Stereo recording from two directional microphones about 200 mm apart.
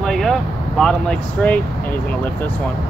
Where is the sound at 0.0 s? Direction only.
Centre (ahead or behind).